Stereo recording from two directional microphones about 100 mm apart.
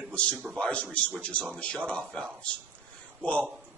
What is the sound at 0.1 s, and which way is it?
A man's voice, 10° left (ahead or behind).